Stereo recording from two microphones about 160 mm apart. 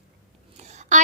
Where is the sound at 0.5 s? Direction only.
45° right (ahead or behind).